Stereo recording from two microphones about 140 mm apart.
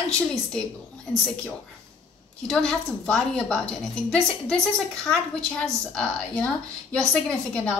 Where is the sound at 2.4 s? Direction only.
5° left (ahead or behind).